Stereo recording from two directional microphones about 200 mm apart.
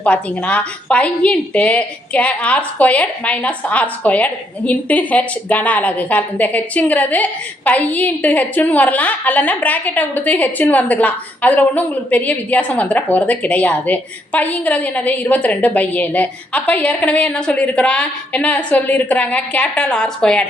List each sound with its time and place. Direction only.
0.0 s a woman's voice: 5° left (ahead or behind)